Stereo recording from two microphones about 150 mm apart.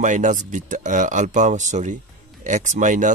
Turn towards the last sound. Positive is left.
turn(degrees=-60)  # may be behind; listen again after turning